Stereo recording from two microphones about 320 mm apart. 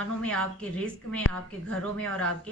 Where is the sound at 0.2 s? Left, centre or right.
Centre.